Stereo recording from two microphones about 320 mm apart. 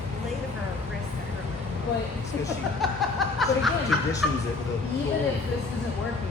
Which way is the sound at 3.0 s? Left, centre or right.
Centre.